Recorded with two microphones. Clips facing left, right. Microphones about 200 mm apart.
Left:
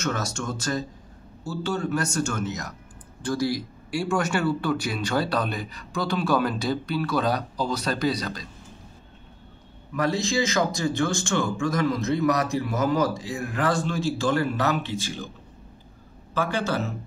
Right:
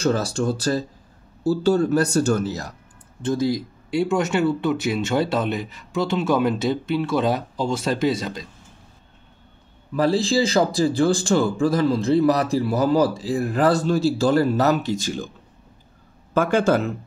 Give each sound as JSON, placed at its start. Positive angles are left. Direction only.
{"t": 0.0, "sound": "speech", "side_deg": -30}
{"t": 3.2, "sound": "speech", "side_deg": -20}
{"t": 9.9, "sound": "speech", "side_deg": -30}
{"t": 16.3, "sound": "speech", "side_deg": -50}